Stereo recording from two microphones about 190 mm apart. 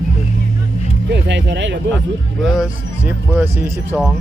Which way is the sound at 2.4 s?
5° right (ahead or behind).